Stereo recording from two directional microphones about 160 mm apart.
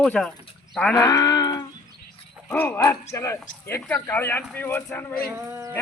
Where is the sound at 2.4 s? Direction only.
10° left (ahead or behind).